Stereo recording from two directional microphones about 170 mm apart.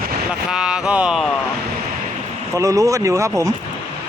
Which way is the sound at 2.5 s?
20° right (ahead or behind).